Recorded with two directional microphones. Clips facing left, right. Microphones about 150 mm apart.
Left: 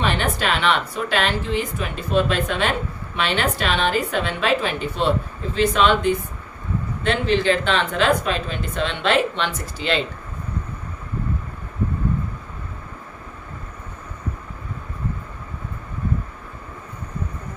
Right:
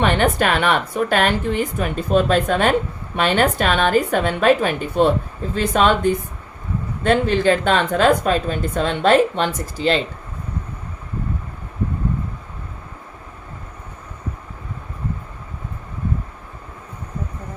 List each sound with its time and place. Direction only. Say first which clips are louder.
0.0 s speech: right 5 dB; 50° right (ahead or behind)